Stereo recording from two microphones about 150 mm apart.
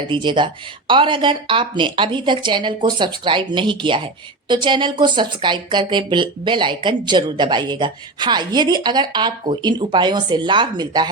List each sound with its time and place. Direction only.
0.1 s speech: 30° right (ahead or behind)